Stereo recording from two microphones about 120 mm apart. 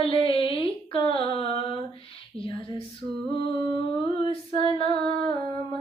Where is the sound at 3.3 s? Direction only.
45° left (ahead or behind).